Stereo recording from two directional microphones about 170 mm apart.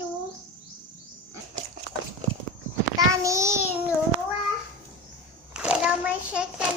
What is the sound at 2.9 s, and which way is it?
Child singing, 20° right (ahead or behind).